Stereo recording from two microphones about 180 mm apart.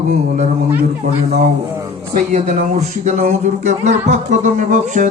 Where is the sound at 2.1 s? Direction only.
45° right (ahead or behind).